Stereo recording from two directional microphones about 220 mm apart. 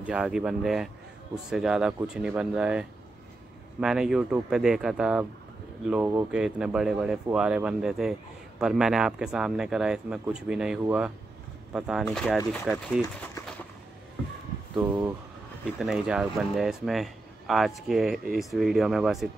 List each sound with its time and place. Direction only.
0.0 s speech: 5° right (ahead or behind)
13.3 s a sound: 5° left (ahead or behind)
14.8 s speech: 10° right (ahead or behind)